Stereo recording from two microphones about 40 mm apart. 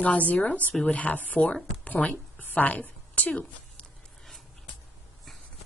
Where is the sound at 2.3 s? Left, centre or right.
Left.